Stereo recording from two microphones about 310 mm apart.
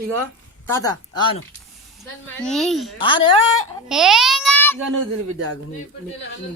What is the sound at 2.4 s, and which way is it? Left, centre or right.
Speech, centre.